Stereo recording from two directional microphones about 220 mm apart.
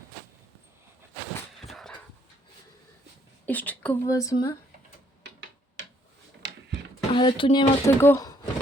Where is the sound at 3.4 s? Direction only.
5° left (ahead or behind).